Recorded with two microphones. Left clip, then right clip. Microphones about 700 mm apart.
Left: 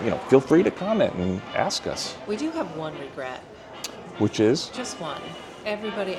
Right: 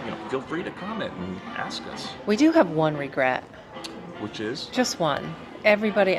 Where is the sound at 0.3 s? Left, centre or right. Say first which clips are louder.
Left 13 dB; left.